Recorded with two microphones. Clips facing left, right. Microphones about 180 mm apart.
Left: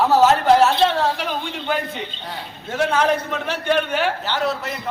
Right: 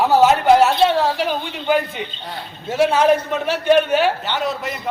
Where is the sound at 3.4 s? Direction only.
20° right (ahead or behind).